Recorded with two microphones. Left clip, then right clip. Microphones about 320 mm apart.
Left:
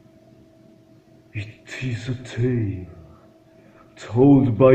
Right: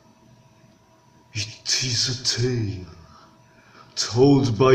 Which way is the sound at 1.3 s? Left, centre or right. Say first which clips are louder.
Right 10 dB; centre.